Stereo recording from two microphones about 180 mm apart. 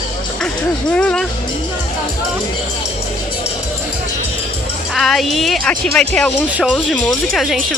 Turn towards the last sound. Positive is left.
turn(degrees=0)  # may be behind; listen again after turning